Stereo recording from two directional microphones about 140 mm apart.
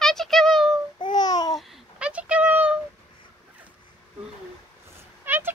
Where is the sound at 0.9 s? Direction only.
30° left (ahead or behind).